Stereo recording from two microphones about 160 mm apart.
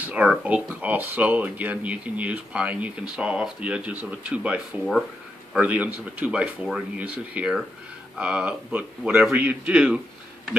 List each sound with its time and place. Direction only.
0.0 s speech: 10° right (ahead or behind)